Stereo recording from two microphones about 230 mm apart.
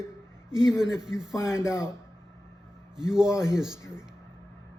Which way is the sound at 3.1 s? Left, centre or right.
Centre.